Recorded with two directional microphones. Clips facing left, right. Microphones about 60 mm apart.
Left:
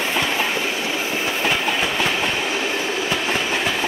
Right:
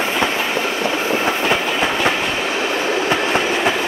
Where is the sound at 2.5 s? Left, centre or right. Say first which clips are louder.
Right 4 dB; right.